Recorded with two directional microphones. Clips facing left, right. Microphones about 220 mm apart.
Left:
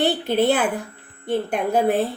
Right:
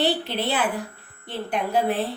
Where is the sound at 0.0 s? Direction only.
50° left (ahead or behind).